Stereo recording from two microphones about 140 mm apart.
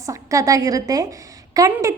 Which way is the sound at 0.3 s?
25° right (ahead or behind).